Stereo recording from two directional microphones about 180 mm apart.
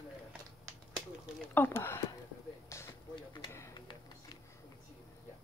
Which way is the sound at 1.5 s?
10° left (ahead or behind).